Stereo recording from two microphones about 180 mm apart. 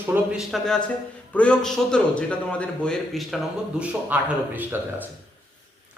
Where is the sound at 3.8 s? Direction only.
10° right (ahead or behind).